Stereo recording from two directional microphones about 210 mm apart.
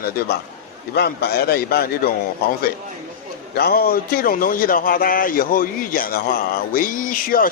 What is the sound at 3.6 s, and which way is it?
Speech, 45° left (ahead or behind).